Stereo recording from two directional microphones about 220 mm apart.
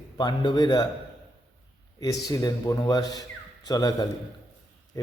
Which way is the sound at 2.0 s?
15° left (ahead or behind).